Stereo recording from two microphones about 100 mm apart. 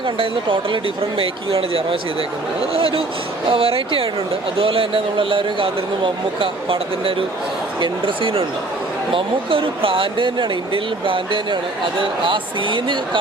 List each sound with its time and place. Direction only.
0.0 s speech: 55° right (ahead or behind)